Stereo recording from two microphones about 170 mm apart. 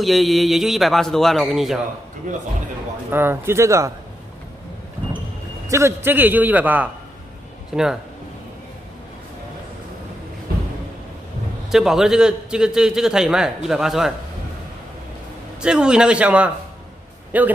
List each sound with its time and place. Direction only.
0.0 s a man's voice: centre (ahead or behind)
3.1 s a man's voice: 15° right (ahead or behind)
5.7 s a man's voice: 15° right (ahead or behind)
11.7 s a man's voice: centre (ahead or behind)
15.6 s a man's voice: 5° right (ahead or behind)